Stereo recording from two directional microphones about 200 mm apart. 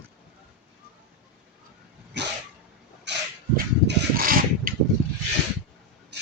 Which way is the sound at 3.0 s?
60° right (ahead or behind).